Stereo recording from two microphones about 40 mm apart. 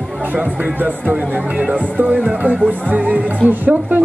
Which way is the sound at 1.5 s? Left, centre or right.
Right.